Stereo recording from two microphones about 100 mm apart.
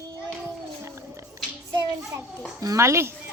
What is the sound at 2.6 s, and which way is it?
Speech, 30° right (ahead or behind).